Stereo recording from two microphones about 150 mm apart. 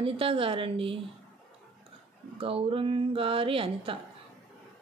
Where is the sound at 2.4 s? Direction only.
40° right (ahead or behind).